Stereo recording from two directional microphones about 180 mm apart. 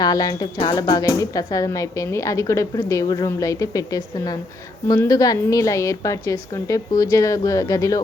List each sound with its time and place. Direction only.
0.0 s speech: 20° left (ahead or behind)